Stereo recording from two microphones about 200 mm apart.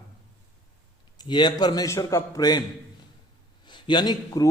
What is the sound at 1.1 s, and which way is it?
A man's voice, 20° left (ahead or behind).